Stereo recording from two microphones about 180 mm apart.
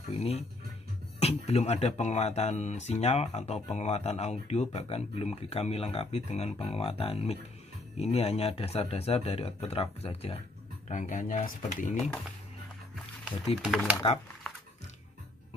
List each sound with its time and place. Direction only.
0.1 s speech: 35° left (ahead or behind)
10.9 s speech: 45° left (ahead or behind)
13.6 s speech: 5° right (ahead or behind)